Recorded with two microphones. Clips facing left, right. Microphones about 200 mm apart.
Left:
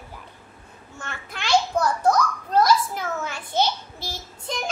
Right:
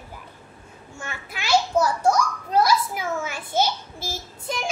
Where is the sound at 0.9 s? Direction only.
10° right (ahead or behind).